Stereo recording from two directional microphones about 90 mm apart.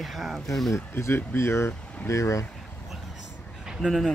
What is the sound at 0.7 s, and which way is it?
Speech, 30° left (ahead or behind).